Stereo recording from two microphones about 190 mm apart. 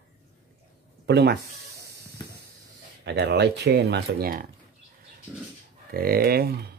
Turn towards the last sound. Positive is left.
turn(degrees=-55)  # may be behind; listen again after turning